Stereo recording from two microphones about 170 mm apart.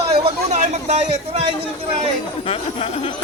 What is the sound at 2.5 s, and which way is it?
Speech, 35° left (ahead or behind).